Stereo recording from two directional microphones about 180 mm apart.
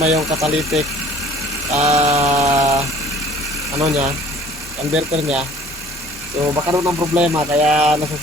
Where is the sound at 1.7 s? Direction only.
35° right (ahead or behind).